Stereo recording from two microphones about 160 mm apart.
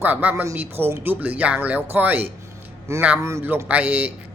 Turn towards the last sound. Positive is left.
turn(degrees=-10)  # may be behind; listen again after turning